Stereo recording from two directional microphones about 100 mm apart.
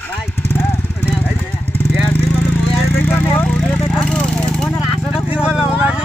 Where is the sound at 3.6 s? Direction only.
Centre (ahead or behind).